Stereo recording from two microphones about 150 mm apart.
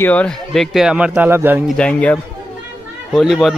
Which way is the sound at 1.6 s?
5° left (ahead or behind).